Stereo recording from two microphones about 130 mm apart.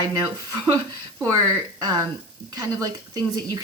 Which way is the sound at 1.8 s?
30° right (ahead or behind).